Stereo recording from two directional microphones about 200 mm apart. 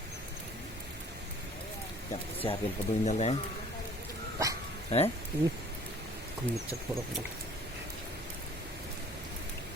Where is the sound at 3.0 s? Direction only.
35° left (ahead or behind).